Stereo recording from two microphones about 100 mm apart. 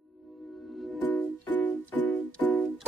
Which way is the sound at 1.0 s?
15° left (ahead or behind).